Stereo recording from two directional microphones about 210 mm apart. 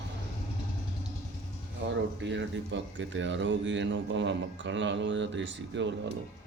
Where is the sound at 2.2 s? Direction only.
60° right (ahead or behind).